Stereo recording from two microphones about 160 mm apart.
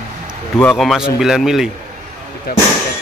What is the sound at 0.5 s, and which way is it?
Speech, 5° left (ahead or behind).